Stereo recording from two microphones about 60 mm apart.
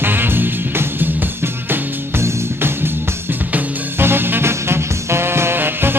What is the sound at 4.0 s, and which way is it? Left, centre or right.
Music, right.